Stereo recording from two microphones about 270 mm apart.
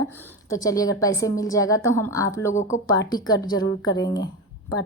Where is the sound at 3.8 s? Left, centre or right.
Left.